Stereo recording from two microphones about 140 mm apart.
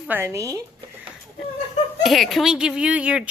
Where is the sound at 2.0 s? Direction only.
Centre (ahead or behind).